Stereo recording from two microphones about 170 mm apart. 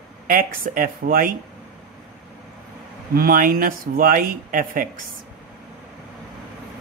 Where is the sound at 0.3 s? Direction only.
55° right (ahead or behind).